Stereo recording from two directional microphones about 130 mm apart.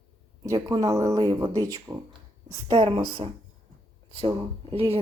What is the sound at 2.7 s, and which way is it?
Speech, 45° right (ahead or behind).